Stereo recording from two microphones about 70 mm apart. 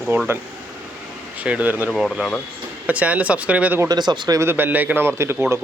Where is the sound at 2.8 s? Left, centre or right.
Centre.